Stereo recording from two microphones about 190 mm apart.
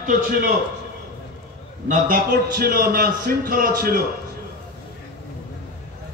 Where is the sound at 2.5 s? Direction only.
55° right (ahead or behind).